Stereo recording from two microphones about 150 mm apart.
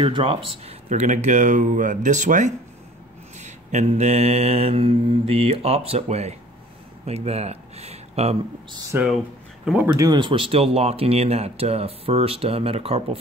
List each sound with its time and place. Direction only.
0.0 s speech: 35° right (ahead or behind)
0.8 s speech: 55° right (ahead or behind)
3.3 s mantra: 50° right (ahead or behind)
7.1 s speech: 45° right (ahead or behind)
8.9 s speech: 15° right (ahead or behind)
9.9 s speech: 25° right (ahead or behind)